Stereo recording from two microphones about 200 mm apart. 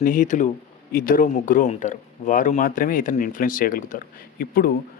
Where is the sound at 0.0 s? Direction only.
40° left (ahead or behind).